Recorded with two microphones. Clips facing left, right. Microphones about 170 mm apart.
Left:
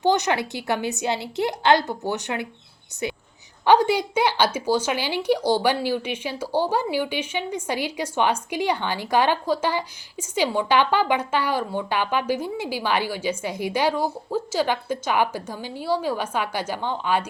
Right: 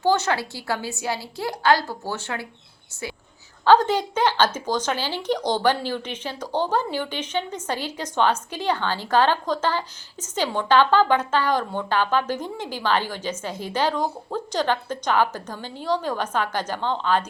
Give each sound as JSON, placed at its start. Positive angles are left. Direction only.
{"t": 0.0, "sound": "a woman's voice", "side_deg": 20}
{"t": 3.7, "sound": "speech", "side_deg": 10}